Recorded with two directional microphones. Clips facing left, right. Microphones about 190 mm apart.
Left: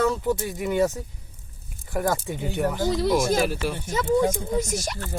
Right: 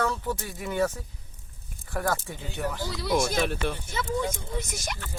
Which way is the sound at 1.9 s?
15° left (ahead or behind).